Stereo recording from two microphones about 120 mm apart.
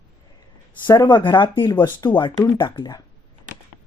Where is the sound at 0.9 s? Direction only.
35° left (ahead or behind).